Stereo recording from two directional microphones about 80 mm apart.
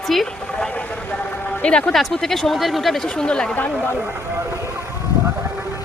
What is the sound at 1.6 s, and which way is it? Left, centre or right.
Speech, centre.